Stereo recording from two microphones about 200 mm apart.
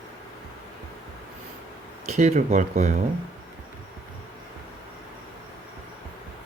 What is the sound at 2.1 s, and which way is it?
Speech, 35° right (ahead or behind).